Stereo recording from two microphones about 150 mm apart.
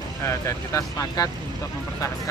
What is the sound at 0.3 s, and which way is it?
Speech, 20° left (ahead or behind).